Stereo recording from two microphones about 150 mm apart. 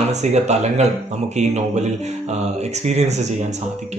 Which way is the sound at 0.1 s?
50° right (ahead or behind).